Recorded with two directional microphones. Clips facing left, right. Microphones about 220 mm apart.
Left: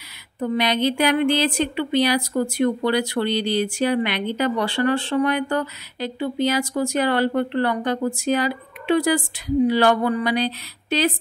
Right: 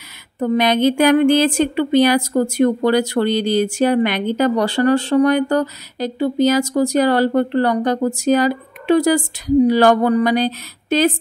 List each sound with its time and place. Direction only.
0.4 s a woman's voice: 50° right (ahead or behind)